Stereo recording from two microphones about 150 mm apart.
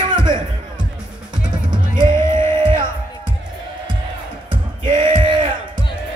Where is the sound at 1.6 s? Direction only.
30° right (ahead or behind).